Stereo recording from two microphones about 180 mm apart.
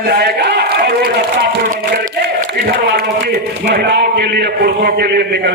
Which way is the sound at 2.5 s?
70° right (ahead or behind).